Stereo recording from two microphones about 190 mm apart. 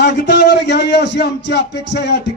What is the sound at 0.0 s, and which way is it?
A man's voice, 65° left (ahead or behind).